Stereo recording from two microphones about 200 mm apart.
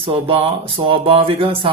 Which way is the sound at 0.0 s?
25° right (ahead or behind).